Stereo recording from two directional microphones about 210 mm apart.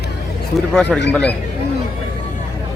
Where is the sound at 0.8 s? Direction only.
5° left (ahead or behind).